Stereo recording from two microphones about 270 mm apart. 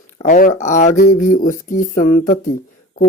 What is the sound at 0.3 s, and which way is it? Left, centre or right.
Speech, left.